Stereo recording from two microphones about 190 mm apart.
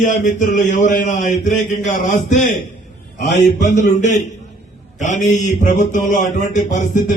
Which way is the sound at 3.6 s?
40° left (ahead or behind).